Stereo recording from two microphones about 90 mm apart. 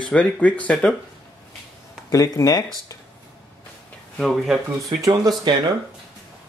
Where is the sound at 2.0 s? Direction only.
40° left (ahead or behind).